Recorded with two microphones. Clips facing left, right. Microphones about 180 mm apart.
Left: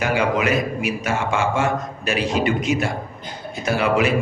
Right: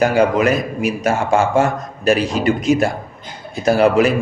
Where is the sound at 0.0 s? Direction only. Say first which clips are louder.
Right 6 dB; 40° right (ahead or behind).